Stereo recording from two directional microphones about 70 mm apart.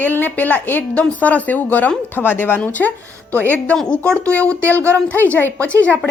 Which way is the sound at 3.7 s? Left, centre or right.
Centre.